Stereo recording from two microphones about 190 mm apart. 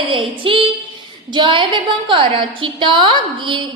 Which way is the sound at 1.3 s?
25° right (ahead or behind).